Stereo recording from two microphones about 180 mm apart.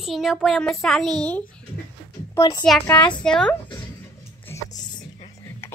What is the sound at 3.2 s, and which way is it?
Speech, 5° left (ahead or behind).